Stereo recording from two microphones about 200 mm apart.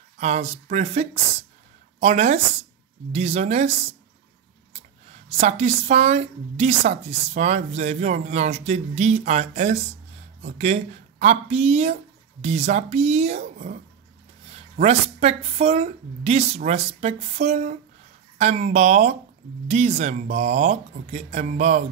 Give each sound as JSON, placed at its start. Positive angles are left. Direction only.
{"t": 0.2, "sound": "a woman's voice", "side_deg": -35}
{"t": 5.4, "sound": "a woman's voice", "side_deg": -35}